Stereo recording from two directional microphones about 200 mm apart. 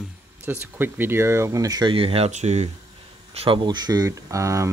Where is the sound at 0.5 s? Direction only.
10° right (ahead or behind).